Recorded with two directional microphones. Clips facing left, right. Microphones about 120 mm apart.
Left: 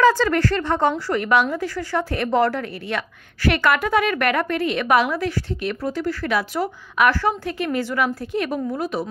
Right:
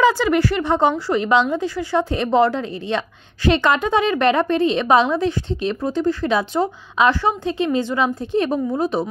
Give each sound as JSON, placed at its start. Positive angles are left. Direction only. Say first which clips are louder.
{"t": 0.0, "sound": "a woman's voice", "louder": "right 1 dB", "side_deg": -15}